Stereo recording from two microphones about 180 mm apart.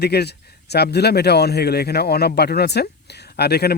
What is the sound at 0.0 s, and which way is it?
Speech, 65° left (ahead or behind).